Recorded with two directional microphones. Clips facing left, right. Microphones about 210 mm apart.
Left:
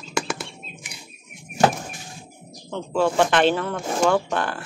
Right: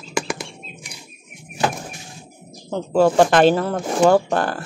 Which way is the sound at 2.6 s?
40° right (ahead or behind).